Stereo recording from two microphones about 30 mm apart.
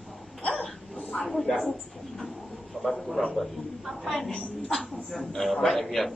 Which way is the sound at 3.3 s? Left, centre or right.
Centre.